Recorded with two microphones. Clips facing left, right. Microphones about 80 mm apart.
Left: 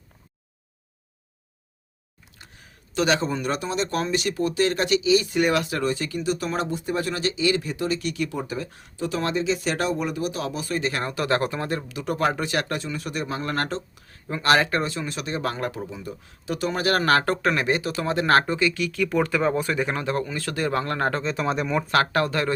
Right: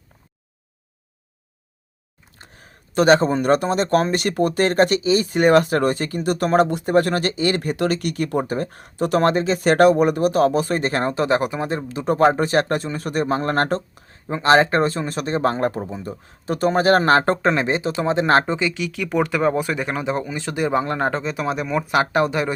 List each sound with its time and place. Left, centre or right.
2.4 s speech: right
11.0 s speech: right
14.1 s speech: right
18.9 s speech: centre
20.0 s speech: centre
21.9 s speech: centre